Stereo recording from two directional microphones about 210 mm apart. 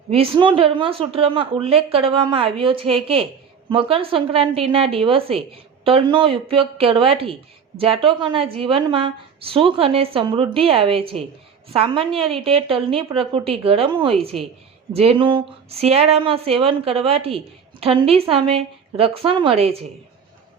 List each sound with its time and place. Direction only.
0.1 s speech: 25° right (ahead or behind)